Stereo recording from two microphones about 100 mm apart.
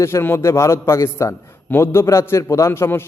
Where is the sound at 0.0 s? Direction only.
25° left (ahead or behind).